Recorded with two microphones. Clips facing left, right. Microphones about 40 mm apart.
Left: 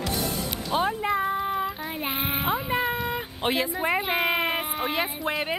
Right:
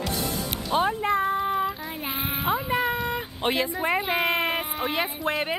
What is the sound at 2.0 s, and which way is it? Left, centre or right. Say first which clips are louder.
Speech: left 3 dB; left.